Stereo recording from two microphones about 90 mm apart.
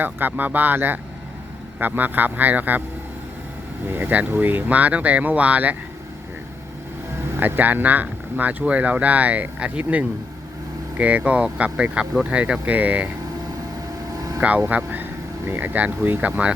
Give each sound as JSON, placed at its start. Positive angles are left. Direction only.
{"t": 0.0, "sound": "speech", "side_deg": -20}
{"t": 3.8, "sound": "speech", "side_deg": -20}
{"t": 7.3, "sound": "speech", "side_deg": -20}
{"t": 14.2, "sound": "vehicle", "side_deg": -40}
{"t": 14.7, "sound": "speech", "side_deg": -20}